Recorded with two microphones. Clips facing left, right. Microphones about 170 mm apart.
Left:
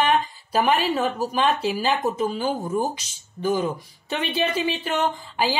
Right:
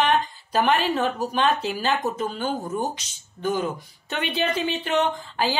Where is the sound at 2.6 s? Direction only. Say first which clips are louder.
Left 3 dB; 25° left (ahead or behind).